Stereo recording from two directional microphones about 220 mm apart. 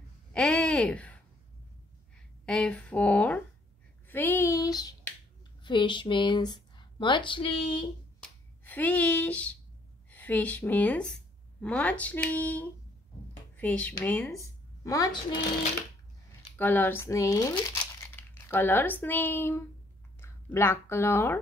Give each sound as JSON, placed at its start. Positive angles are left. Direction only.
{"t": 0.3, "sound": "a sound", "side_deg": 5}
{"t": 2.1, "sound": "speech", "side_deg": 5}
{"t": 4.1, "sound": "finger snapping", "side_deg": 10}
{"t": 5.6, "sound": "speech", "side_deg": 20}
{"t": 8.2, "sound": "finger snapping", "side_deg": 5}
{"t": 10.0, "sound": "a woman's voice", "side_deg": 5}
{"t": 16.5, "sound": "speech", "side_deg": 10}